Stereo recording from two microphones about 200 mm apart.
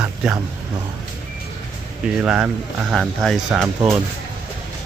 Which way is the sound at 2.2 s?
5° right (ahead or behind).